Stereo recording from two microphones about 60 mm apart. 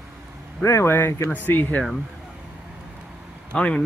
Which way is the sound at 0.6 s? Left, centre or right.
Left.